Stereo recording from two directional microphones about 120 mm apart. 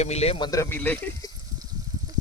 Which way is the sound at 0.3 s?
40° left (ahead or behind).